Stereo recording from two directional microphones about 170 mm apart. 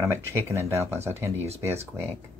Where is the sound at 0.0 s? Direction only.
15° right (ahead or behind).